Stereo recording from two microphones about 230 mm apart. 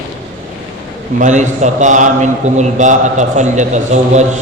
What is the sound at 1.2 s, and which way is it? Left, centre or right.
A man's voice, right.